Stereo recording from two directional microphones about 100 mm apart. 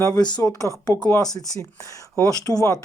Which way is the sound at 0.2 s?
45° left (ahead or behind).